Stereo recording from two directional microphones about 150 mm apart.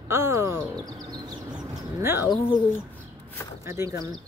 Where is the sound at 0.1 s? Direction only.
20° right (ahead or behind).